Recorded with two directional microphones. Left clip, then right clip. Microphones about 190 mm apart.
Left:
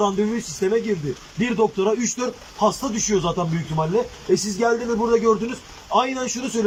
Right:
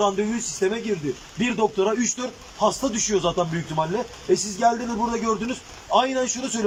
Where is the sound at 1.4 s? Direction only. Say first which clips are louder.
Left 2 dB; centre (ahead or behind).